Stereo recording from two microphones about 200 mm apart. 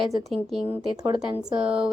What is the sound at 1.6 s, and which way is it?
Speech, 5° right (ahead or behind).